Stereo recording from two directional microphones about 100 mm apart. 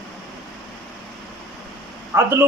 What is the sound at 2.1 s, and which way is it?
Speech, 25° right (ahead or behind).